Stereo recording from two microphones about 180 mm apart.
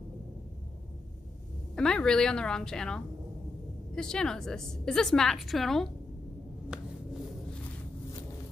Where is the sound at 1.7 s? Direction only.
5° left (ahead or behind).